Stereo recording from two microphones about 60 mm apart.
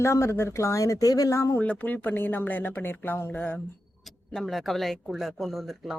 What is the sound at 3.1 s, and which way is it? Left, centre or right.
Speech, left.